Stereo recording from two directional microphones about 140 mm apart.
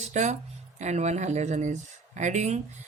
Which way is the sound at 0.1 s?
55° right (ahead or behind).